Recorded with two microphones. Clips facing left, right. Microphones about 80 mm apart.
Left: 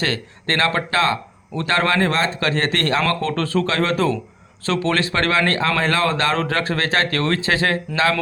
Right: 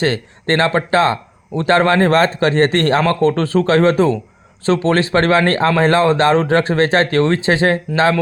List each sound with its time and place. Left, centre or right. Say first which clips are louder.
0.0 s a man's voice: right 6 dB; right